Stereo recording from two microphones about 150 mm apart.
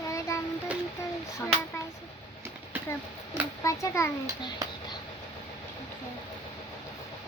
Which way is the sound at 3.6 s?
20° left (ahead or behind).